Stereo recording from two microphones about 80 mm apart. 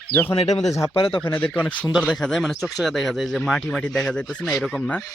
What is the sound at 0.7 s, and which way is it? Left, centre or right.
Speech, left.